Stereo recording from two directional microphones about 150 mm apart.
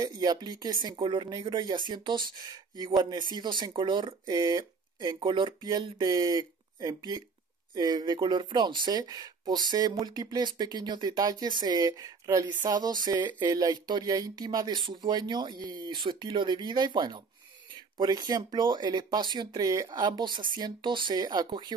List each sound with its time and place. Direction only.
0.0 s speech: 25° right (ahead or behind)